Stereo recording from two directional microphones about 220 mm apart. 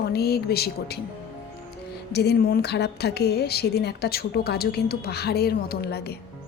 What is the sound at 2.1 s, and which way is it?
Speech, 45° left (ahead or behind).